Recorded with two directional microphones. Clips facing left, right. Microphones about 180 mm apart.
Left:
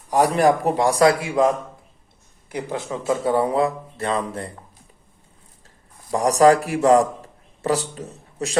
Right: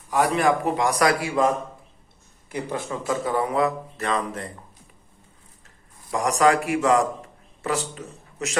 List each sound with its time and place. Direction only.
0.1 s a man's voice: 40° left (ahead or behind)
2.5 s speech: 20° left (ahead or behind)
5.6 s a man's voice: 35° left (ahead or behind)